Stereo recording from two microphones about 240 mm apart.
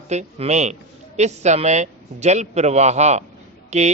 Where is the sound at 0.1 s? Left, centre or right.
Right.